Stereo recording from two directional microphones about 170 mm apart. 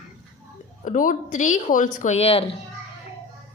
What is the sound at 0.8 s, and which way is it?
Speech, 50° left (ahead or behind).